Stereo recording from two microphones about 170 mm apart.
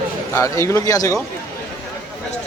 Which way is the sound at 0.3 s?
20° left (ahead or behind).